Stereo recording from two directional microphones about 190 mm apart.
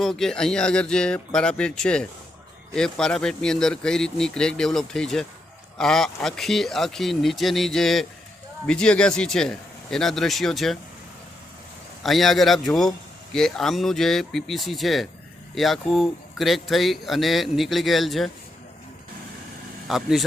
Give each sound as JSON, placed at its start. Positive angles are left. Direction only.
{"t": 0.0, "sound": "speech", "side_deg": 0}
{"t": 12.0, "sound": "speech", "side_deg": 0}
{"t": 19.9, "sound": "speech", "side_deg": 0}